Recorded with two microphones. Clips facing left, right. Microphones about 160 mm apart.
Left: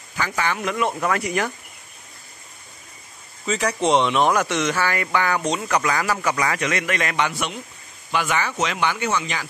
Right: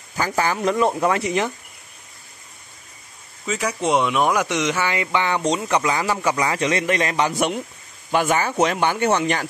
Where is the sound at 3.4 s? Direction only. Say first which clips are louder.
Left 1 dB; 5° right (ahead or behind); by 7.4 s 35° right (ahead or behind).